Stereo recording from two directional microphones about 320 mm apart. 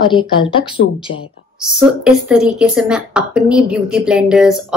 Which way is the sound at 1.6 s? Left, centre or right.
Centre.